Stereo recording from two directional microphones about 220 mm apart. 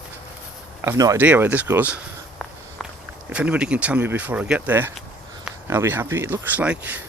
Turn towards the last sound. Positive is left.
turn(degrees=-5)  # may be behind; listen again after turning